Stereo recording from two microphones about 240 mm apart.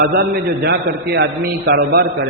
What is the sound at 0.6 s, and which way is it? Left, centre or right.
A man's voice, right.